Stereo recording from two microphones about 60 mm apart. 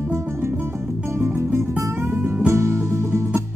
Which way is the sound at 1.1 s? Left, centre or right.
Right.